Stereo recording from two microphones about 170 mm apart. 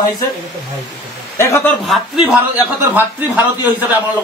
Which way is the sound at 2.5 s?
10° right (ahead or behind).